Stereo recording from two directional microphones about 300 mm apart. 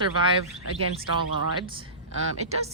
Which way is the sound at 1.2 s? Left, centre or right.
Centre.